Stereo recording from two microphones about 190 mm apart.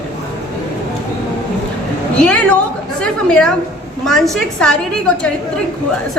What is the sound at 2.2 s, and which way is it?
A woman's voice, 5° left (ahead or behind).